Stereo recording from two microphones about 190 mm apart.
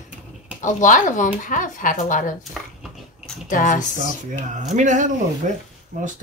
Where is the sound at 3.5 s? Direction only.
45° left (ahead or behind).